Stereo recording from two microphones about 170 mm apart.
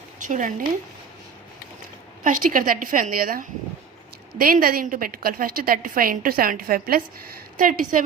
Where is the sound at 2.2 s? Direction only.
50° right (ahead or behind).